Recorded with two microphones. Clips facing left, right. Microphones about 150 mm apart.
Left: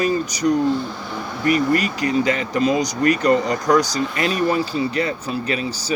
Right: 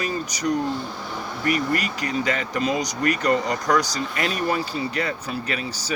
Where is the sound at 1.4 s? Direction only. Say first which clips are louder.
Left 6 dB; 30° left (ahead or behind).